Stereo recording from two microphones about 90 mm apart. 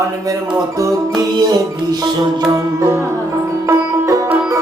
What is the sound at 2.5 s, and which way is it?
Music, 30° right (ahead or behind).